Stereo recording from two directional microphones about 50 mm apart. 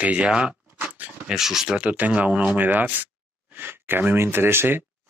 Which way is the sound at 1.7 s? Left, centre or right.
Right.